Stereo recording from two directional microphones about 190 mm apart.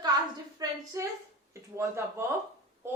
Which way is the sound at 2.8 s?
15° right (ahead or behind).